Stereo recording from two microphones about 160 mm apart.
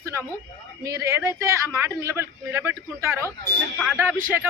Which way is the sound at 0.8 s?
20° right (ahead or behind).